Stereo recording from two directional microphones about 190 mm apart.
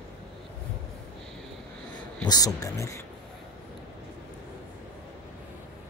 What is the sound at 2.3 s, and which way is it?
Speech, 20° left (ahead or behind).